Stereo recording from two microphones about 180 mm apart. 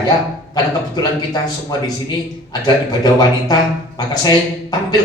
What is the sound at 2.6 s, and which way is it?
Speech, 25° left (ahead or behind).